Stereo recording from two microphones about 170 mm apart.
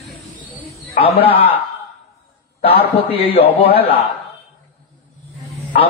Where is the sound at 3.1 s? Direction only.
35° left (ahead or behind).